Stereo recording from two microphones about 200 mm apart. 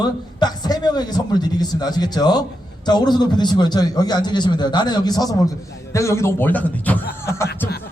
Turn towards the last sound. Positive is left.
turn(degrees=15)  # may be behind; listen again after turning